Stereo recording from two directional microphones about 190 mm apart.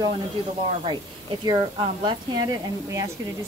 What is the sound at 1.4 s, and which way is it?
A woman's voice, 25° right (ahead or behind).